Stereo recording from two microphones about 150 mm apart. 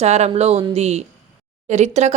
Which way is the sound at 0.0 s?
45° right (ahead or behind).